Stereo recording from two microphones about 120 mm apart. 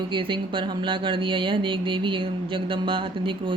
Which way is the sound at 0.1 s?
45° right (ahead or behind).